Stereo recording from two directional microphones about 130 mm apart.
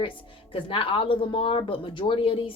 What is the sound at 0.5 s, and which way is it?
Speech, 40° left (ahead or behind).